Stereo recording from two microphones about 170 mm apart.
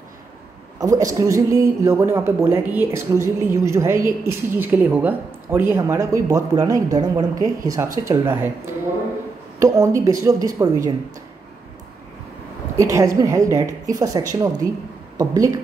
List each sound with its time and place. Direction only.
0.7 s speech: 20° right (ahead or behind)
9.6 s a woman's voice: 20° right (ahead or behind)
12.7 s a woman's voice: 20° right (ahead or behind)